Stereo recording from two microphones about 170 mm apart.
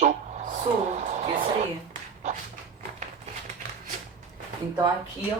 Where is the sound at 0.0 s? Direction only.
45° right (ahead or behind).